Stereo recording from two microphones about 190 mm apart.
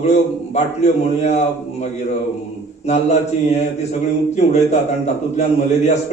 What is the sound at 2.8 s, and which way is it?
A man's voice, 35° left (ahead or behind).